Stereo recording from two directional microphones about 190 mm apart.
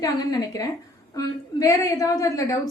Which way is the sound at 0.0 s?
20° left (ahead or behind).